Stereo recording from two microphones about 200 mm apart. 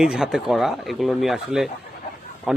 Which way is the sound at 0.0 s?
Centre (ahead or behind).